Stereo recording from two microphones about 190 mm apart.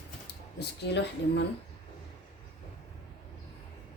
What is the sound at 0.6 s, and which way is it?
Speech, 65° left (ahead or behind).